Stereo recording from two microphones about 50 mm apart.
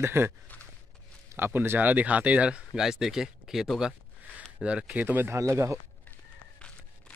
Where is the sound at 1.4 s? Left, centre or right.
Right.